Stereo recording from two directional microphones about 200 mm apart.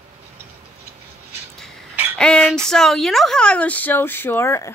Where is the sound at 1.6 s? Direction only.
Centre (ahead or behind).